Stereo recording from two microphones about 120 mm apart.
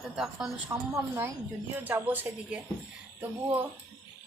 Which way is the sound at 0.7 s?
20° right (ahead or behind).